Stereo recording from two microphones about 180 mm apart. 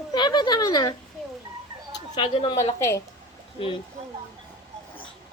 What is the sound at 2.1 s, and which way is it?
Speech, 30° left (ahead or behind).